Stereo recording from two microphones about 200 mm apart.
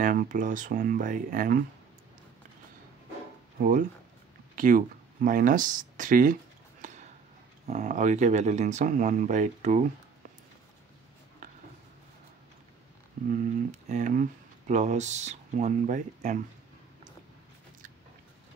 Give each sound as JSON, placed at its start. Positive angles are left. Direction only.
{"t": 0.0, "sound": "speech", "side_deg": -40}
{"t": 4.6, "sound": "speech", "side_deg": -45}
{"t": 6.8, "sound": "a sound", "side_deg": -35}
{"t": 7.6, "sound": "speech", "side_deg": -35}
{"t": 13.3, "sound": "speech", "side_deg": -35}